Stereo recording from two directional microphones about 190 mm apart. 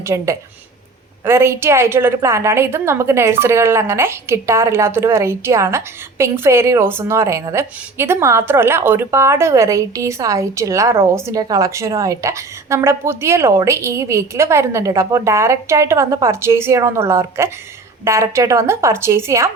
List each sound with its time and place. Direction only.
0.0 s a woman's voice: 15° right (ahead or behind)